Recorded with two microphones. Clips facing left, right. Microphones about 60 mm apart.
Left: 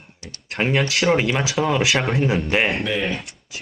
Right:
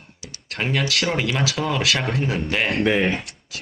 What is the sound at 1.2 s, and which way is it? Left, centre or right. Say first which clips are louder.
Speech: left 3 dB; left.